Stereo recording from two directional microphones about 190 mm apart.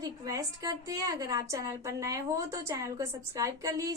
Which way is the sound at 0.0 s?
20° right (ahead or behind).